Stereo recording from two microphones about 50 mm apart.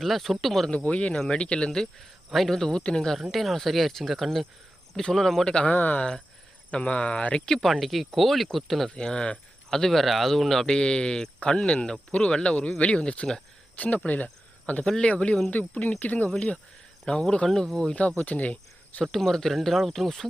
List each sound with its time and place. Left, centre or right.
0.0 s speech: centre
0.7 s speech: left
3.2 s speech: centre
5.7 s speech: left
6.0 s speech: centre
7.4 s speech: centre
8.9 s speech: centre
9.7 s speech: centre
13.7 s speech: left
14.8 s speech: centre; by 16.3 s left
17.1 s speech: centre
18.3 s cricket: left
19.0 s speech: centre